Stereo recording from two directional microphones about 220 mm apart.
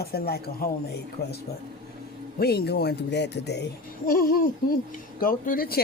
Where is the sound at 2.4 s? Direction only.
45° left (ahead or behind).